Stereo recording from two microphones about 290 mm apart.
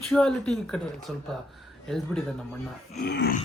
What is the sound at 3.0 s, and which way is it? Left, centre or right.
Groan, left.